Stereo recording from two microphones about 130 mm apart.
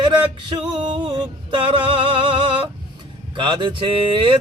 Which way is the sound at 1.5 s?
40° right (ahead or behind).